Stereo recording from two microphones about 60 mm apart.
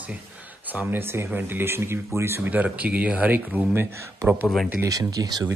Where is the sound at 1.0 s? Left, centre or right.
Right.